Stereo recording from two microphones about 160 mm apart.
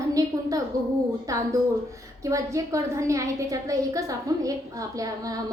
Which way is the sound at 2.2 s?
20° right (ahead or behind).